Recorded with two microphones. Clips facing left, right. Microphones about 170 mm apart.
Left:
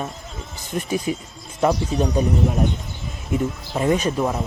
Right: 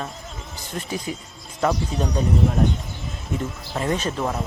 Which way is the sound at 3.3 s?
15° left (ahead or behind).